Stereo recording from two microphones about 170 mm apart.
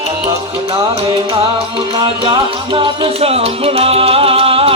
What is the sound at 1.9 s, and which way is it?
Music, 30° right (ahead or behind).